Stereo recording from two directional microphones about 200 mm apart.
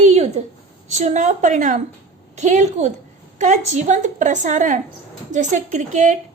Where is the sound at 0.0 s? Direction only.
35° right (ahead or behind).